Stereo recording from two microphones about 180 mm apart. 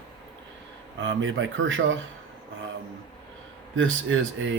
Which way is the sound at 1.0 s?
90° right.